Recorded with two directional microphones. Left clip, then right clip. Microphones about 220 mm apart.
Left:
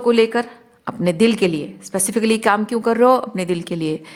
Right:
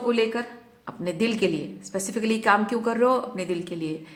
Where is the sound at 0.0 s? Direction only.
45° left (ahead or behind).